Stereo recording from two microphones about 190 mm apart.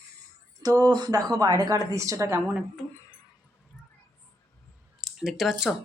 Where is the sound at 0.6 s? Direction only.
20° right (ahead or behind).